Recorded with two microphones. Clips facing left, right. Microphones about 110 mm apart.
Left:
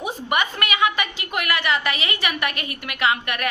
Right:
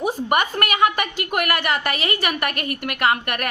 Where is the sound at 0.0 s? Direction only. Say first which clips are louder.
Right 3 dB; 45° right (ahead or behind).